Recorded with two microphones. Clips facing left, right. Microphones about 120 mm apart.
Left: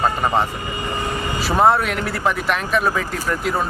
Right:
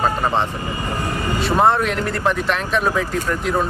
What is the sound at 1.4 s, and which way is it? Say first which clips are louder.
Speech: even; 5° left (ahead or behind).